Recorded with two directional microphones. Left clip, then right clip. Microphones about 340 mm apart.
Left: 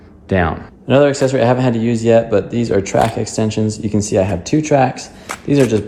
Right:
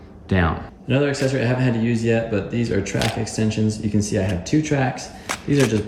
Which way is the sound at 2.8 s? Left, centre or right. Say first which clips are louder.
Left 9 dB; centre.